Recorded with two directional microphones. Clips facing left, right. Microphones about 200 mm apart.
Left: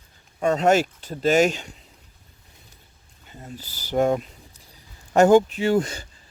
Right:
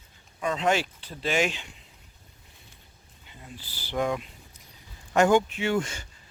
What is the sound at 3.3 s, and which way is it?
Speech, 45° left (ahead or behind).